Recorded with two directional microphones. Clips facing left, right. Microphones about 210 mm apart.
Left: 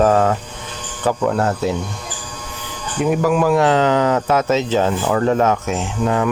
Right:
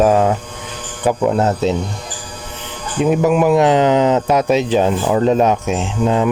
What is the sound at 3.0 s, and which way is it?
Speech, 20° right (ahead or behind).